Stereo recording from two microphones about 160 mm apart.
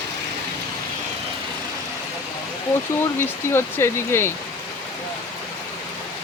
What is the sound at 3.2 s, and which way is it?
Speech, 15° left (ahead or behind).